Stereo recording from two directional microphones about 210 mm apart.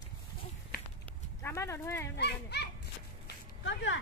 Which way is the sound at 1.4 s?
15° left (ahead or behind).